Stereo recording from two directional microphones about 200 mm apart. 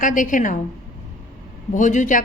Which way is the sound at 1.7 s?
40° left (ahead or behind).